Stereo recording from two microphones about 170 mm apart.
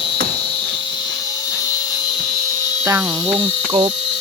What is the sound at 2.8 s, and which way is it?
Speech, 15° right (ahead or behind).